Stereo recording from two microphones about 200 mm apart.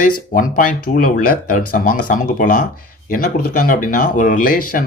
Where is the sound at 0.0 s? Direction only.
40° left (ahead or behind).